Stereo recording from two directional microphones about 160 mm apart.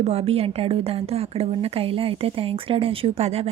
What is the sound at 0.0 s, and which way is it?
A woman's voice, 40° right (ahead or behind).